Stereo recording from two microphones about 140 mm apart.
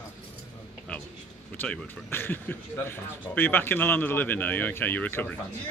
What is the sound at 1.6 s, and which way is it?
A man's voice, 15° left (ahead or behind).